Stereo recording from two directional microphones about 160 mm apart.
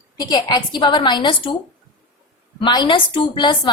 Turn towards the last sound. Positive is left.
turn(degrees=30)  # may be behind; listen again after turning